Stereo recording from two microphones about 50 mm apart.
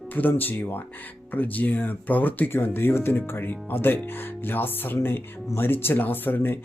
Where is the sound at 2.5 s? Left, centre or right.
Left.